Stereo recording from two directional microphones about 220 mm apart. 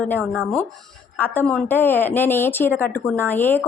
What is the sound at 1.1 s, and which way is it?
A woman's voice, 10° left (ahead or behind).